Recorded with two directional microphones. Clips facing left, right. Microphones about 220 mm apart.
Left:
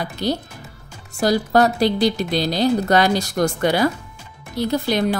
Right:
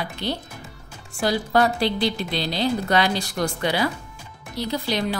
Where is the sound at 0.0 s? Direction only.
40° left (ahead or behind).